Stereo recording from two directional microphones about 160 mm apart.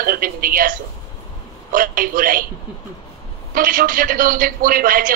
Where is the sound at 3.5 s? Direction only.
60° right (ahead or behind).